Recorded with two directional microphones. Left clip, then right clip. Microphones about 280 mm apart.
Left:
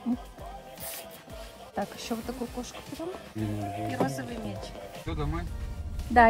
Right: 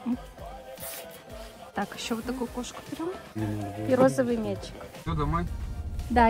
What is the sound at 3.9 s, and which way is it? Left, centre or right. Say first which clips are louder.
Speech: right 13 dB; centre.